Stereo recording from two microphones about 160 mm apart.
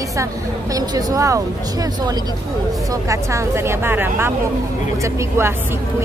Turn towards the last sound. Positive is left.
turn(degrees=-15)  # may be behind; listen again after turning